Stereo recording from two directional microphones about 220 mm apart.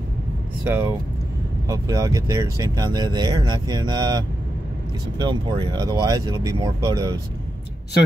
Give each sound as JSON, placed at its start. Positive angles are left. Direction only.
{"t": 0.7, "sound": "speech", "side_deg": -10}
{"t": 5.2, "sound": "speech", "side_deg": -20}